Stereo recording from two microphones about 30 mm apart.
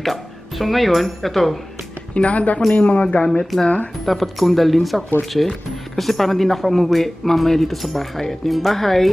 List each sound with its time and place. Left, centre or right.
0.0 s speech: centre
2.1 s speech: left
3.5 s speech: centre